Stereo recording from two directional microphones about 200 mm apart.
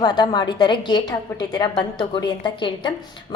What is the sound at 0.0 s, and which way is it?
A woman's voice, 20° left (ahead or behind).